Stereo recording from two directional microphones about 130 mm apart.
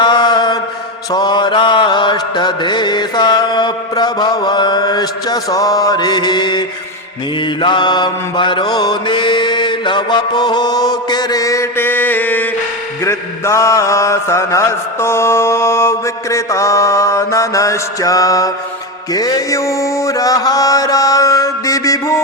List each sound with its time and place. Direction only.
0.0 s mantra: 35° left (ahead or behind)